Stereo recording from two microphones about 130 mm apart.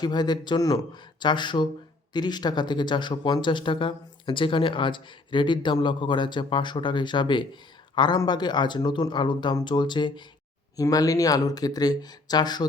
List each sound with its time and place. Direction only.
0.0 s speech: 35° left (ahead or behind)